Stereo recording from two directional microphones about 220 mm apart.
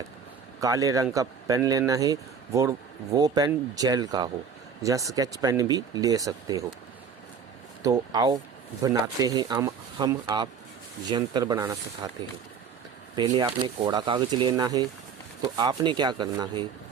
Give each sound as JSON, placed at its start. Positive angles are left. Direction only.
{"t": 0.6, "sound": "speech", "side_deg": -15}
{"t": 7.8, "sound": "speech", "side_deg": -15}
{"t": 13.1, "sound": "speech", "side_deg": -20}